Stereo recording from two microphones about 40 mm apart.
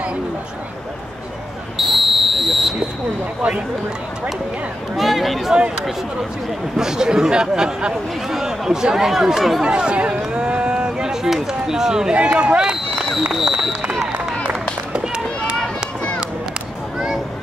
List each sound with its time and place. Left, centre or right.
1.8 s a sound: centre
4.9 s speech: centre
6.8 s speech: centre
9.7 s speech: right
11.1 s speech: centre
12.2 s speech: right
13.3 s run: centre
14.9 s run: right